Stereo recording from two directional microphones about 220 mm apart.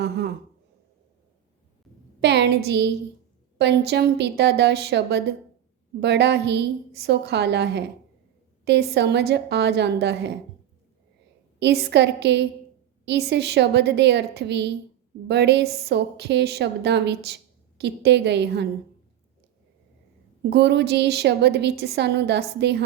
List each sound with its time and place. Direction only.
0.0 s a woman's voice: 45° right (ahead or behind)
2.2 s a woman's voice: 50° right (ahead or behind)
11.6 s a woman's voice: 50° right (ahead or behind)
20.5 s a woman's voice: 50° right (ahead or behind)